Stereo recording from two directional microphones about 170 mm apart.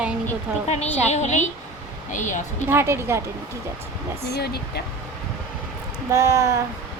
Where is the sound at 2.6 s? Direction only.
15° right (ahead or behind).